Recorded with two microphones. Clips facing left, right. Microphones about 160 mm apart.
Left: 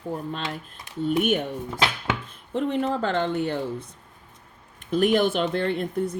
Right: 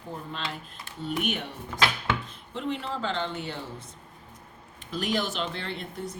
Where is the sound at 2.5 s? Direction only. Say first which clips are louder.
Left 8 dB; 50° left (ahead or behind).